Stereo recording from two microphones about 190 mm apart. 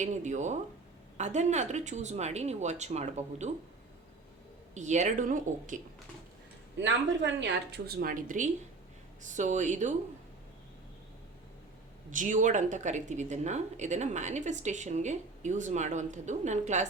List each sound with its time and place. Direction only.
0.0 s speech: 40° right (ahead or behind)
4.7 s speech: 40° right (ahead or behind)
6.7 s speech: 70° right (ahead or behind); by 9.9 s 40° right (ahead or behind)
12.1 s speech: 40° right (ahead or behind)